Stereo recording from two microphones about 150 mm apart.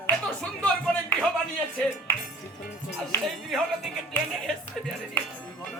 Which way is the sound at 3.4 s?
Centre (ahead or behind).